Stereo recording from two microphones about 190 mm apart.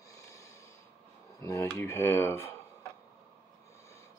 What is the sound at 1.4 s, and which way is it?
Speech, 15° left (ahead or behind).